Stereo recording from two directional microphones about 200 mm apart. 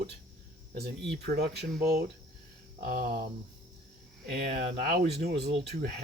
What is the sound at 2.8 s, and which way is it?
Speech, 45° right (ahead or behind).